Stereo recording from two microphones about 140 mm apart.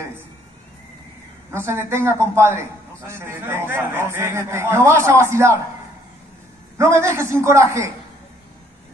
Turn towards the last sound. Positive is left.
turn(degrees=-20)  # may be behind; listen again after turning